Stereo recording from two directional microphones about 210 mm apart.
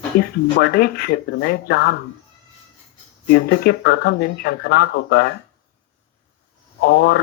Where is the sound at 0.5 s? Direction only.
45° left (ahead or behind).